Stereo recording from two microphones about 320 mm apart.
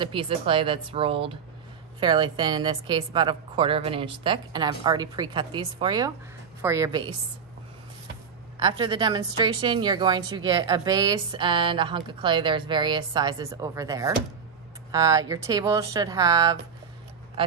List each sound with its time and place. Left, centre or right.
0.0 s a woman's voice: centre
8.5 s a woman's voice: centre